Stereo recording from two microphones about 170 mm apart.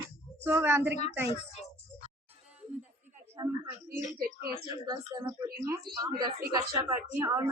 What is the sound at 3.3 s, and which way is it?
Speech, 20° right (ahead or behind).